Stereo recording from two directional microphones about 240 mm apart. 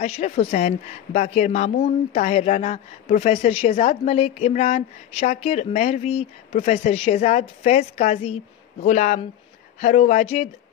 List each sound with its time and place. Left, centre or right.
0.0 s a woman's voice: left